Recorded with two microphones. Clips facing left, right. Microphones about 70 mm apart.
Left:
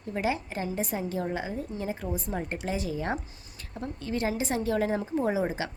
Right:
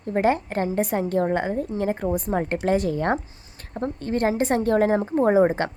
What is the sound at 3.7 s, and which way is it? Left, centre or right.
A woman's voice, right.